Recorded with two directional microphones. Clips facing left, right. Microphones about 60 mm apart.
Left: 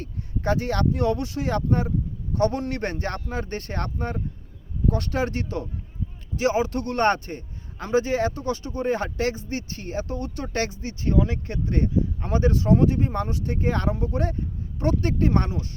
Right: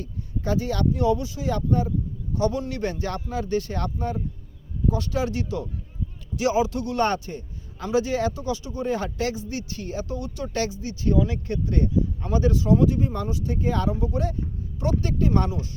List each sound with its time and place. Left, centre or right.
0.0 s speech: left